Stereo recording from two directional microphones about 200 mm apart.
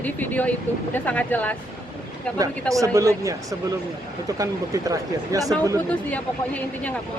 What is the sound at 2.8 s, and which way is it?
Speech, 15° right (ahead or behind).